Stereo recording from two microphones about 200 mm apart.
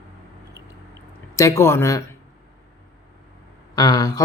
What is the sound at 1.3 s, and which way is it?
Speech, 15° left (ahead or behind).